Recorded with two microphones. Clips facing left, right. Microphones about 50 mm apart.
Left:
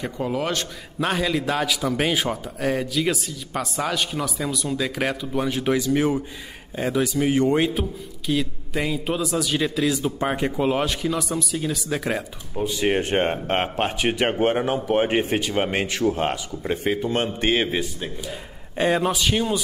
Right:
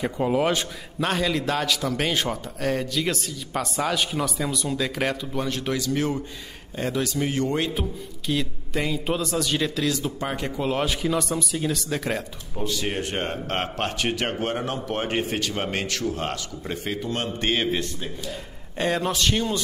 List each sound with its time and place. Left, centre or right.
0.0 s a man's voice: centre
0.9 s a man's voice: centre
8.3 s a man's voice: centre
10.8 s a man's voice: centre; by 17.5 s left
17.5 s a man's voice: centre